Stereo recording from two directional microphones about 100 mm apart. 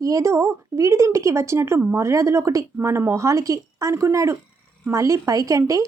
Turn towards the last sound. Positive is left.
turn(degrees=-35)  # may be behind; listen again after turning